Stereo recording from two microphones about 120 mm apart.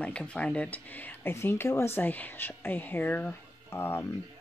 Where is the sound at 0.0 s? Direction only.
10° left (ahead or behind).